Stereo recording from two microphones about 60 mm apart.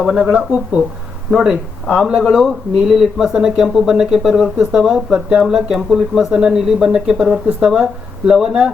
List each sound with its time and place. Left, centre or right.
0.1 s speech: centre
0.3 s speech: right
1.3 s speech: centre